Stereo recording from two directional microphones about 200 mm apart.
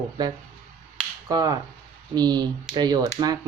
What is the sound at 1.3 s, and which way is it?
Speech, 20° right (ahead or behind).